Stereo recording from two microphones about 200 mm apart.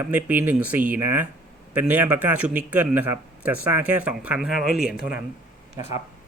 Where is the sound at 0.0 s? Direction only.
10° right (ahead or behind).